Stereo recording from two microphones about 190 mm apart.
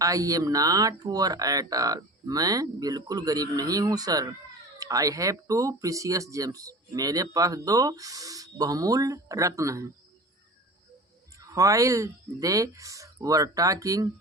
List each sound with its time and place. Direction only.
0.0 s speech: 15° right (ahead or behind)
11.3 s speech: 15° right (ahead or behind)